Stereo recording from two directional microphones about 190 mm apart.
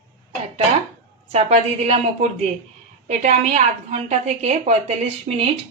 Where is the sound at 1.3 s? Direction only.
35° right (ahead or behind).